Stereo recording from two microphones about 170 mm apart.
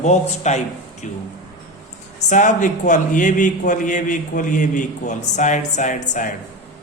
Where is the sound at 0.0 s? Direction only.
45° left (ahead or behind).